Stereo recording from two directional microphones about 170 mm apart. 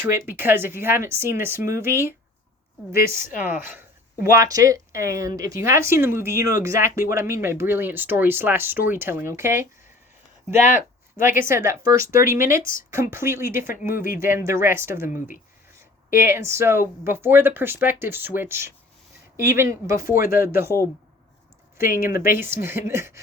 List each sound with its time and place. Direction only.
0.0 s speech: 15° right (ahead or behind)
3.4 s speech: 10° right (ahead or behind)
10.6 s speech: 50° left (ahead or behind)
11.4 s speech: 15° right (ahead or behind)
13.9 s speech: 55° left (ahead or behind)
14.2 s speech: 15° right (ahead or behind)
20.0 s speech: 55° left (ahead or behind)
20.5 s speech: 15° right (ahead or behind)
22.1 s speech: 15° right (ahead or behind)